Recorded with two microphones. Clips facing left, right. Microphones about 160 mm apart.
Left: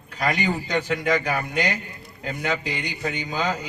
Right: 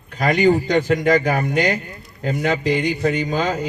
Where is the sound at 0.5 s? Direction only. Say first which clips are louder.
Right 8 dB; 40° right (ahead or behind).